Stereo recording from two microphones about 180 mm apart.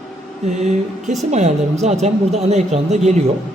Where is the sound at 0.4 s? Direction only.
40° right (ahead or behind).